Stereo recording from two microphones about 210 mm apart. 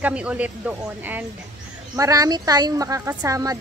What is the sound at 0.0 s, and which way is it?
Speech, 5° right (ahead or behind).